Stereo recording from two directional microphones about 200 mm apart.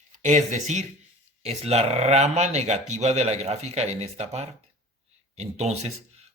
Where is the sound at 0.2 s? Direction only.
35° right (ahead or behind).